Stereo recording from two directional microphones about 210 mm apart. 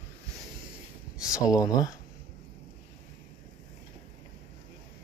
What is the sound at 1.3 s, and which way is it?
Speech, 15° left (ahead or behind).